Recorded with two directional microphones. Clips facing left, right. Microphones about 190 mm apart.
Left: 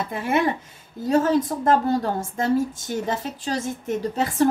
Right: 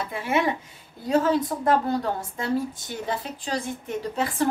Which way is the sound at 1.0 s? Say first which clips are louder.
Left 2 dB; 45° left (ahead or behind).